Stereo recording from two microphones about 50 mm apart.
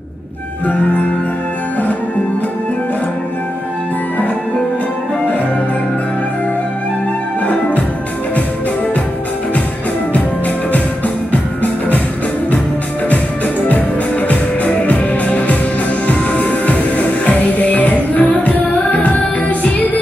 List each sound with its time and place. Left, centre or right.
13.7 s music: left